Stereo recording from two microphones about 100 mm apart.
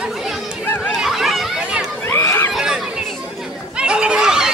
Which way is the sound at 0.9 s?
Centre (ahead or behind).